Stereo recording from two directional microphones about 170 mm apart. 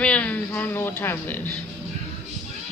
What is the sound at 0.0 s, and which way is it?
A woman's voice, 5° left (ahead or behind).